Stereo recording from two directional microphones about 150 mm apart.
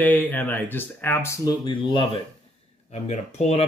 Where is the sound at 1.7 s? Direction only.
35° left (ahead or behind).